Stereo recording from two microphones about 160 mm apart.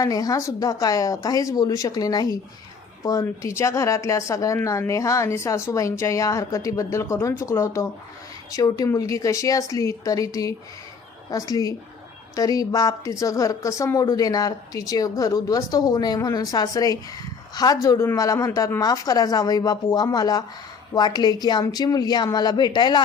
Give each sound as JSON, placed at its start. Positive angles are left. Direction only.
{"t": 0.0, "sound": "speech", "side_deg": 20}